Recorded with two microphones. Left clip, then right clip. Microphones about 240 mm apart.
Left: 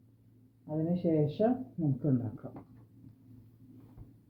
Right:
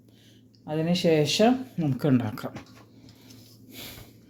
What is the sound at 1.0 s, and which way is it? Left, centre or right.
Speech, right.